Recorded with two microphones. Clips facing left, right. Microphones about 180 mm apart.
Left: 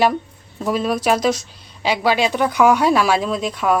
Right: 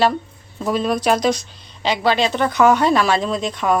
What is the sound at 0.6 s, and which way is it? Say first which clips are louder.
Speech: even; 5° left (ahead or behind).